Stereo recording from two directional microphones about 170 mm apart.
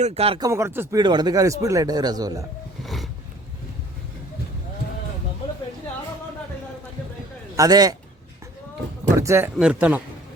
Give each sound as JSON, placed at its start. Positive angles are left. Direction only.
{"t": 0.0, "sound": "speech", "side_deg": -35}
{"t": 0.3, "sound": "speech", "side_deg": -20}
{"t": 2.8, "sound": "a sound", "side_deg": 0}
{"t": 7.5, "sound": "speech", "side_deg": -20}
{"t": 9.1, "sound": "speech", "side_deg": -15}
{"t": 9.6, "sound": "speech", "side_deg": -5}